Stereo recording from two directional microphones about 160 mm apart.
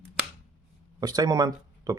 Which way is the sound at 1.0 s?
25° right (ahead or behind).